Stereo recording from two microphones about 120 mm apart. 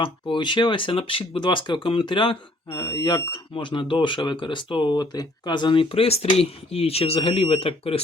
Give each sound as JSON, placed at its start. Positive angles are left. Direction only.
{"t": 0.0, "sound": "speech", "side_deg": 40}